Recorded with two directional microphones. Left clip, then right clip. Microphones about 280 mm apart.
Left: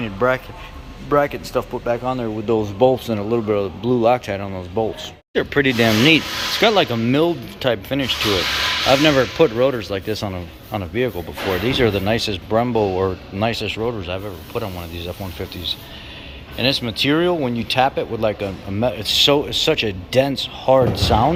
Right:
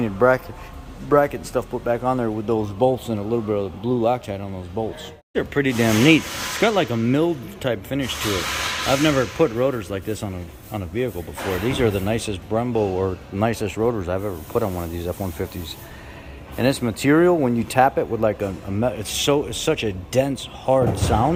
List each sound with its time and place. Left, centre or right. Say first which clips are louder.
0.0 s speech: right 1 dB; centre
16.6 s speech: left 3 dB; centre